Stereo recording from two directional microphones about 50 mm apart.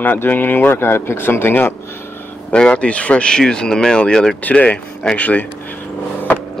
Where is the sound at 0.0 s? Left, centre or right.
Left.